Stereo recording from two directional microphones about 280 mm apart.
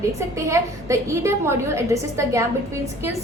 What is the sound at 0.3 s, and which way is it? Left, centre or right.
A woman's voice, centre.